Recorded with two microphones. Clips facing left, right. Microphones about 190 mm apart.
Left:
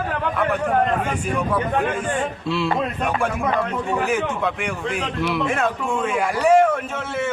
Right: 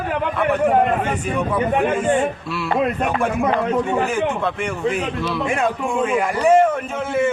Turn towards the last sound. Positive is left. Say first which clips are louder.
# right 1 dB
turn(degrees=-5)  # may be behind; listen again after turning